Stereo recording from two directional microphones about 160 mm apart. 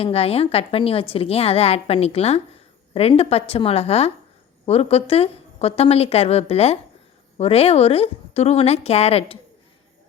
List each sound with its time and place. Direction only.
0.0 s a woman's voice: 40° left (ahead or behind)